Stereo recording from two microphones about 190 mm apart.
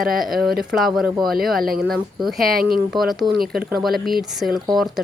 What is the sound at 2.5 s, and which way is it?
Speech, 50° right (ahead or behind).